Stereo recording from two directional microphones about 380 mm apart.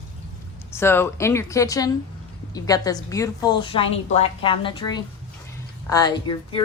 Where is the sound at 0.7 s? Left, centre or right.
Centre.